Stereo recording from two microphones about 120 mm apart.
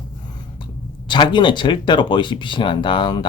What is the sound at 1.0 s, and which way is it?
Speech, 40° left (ahead or behind).